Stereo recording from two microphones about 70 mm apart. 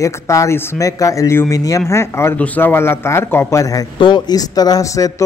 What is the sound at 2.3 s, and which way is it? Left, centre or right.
A man's voice, left.